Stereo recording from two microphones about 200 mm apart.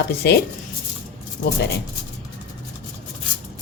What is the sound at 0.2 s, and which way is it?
Speech, 55° left (ahead or behind).